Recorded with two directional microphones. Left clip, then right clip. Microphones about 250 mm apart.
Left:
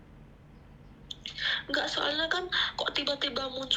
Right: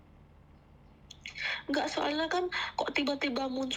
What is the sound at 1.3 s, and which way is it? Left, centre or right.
Speech, right.